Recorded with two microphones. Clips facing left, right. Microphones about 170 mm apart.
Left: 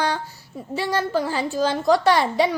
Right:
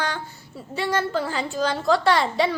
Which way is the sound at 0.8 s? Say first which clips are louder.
Left 1 dB; 20° left (ahead or behind).